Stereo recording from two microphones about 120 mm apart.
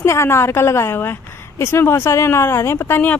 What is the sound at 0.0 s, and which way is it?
A woman's voice, 25° left (ahead or behind).